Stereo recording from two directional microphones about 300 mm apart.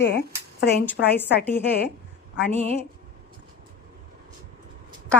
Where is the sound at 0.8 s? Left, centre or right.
Centre.